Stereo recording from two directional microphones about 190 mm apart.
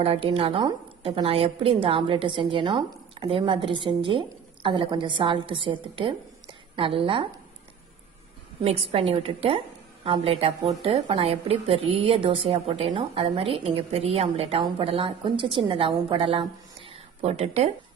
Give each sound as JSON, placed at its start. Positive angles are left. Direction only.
{"t": 0.0, "sound": "a woman's voice", "side_deg": -30}
{"t": 8.6, "sound": "a woman's voice", "side_deg": -30}